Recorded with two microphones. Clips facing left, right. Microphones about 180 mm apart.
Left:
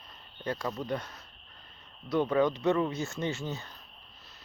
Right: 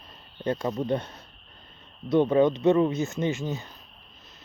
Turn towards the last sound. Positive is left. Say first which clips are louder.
# right 6 dB
turn(degrees=-15)  # may be behind; listen again after turning